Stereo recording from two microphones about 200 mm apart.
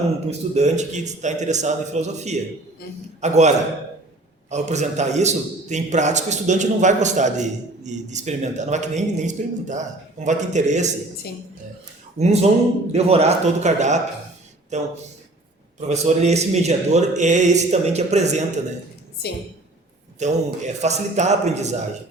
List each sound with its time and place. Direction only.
0.3 s a man's voice: 35° right (ahead or behind)
12.2 s a man's voice: 35° right (ahead or behind)
15.9 s a man's voice: 35° right (ahead or behind)
20.1 s a man's voice: 35° right (ahead or behind)